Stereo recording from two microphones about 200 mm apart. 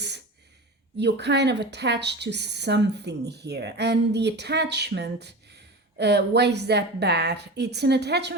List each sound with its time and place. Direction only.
0.9 s a woman's voice: 55° right (ahead or behind)